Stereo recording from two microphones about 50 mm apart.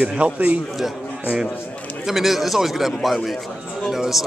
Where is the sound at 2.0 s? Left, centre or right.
Centre.